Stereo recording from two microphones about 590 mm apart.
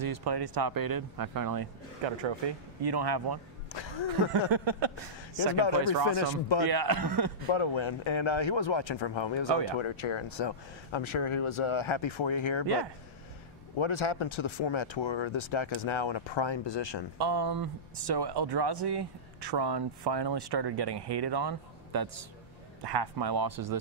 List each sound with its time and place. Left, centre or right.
0.0 s speech: right
2.0 s speech: right
3.7 s speech: left
4.3 s a sound: right
6.1 s speech: left
6.7 s speech: right
7.5 s speech: left
13.7 s speech: left
17.2 s speech: right